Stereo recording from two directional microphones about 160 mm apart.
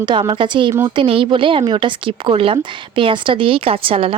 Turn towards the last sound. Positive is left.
turn(degrees=-35)  # may be behind; listen again after turning